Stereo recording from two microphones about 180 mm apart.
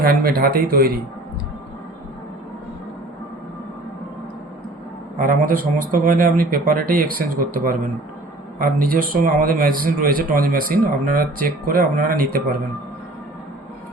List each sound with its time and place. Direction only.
0.0 s speech: 55° right (ahead or behind)
5.1 s speech: 50° right (ahead or behind)
8.5 s speech: 50° right (ahead or behind)